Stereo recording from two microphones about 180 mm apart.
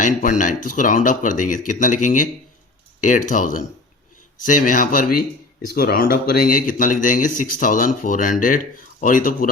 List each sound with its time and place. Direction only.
0.0 s speech: 45° left (ahead or behind)